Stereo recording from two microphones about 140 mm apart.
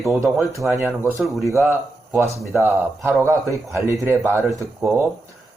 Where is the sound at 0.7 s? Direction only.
20° right (ahead or behind).